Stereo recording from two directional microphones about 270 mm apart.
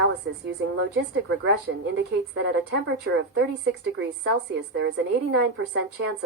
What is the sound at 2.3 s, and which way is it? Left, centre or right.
A woman's voice, right.